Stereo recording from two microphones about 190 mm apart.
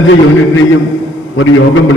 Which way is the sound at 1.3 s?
90° left.